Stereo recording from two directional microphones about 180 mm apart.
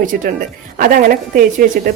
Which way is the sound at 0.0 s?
45° right (ahead or behind).